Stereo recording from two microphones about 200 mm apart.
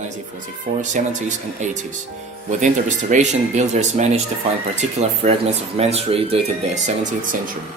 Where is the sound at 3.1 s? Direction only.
35° right (ahead or behind).